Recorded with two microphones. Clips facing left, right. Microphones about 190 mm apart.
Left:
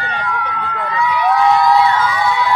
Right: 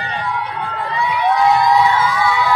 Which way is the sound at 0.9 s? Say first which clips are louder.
Left 3 dB; 35° right (ahead or behind).